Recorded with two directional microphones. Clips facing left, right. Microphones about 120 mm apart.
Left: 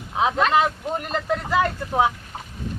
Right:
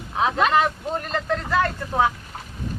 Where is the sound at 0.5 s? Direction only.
15° left (ahead or behind).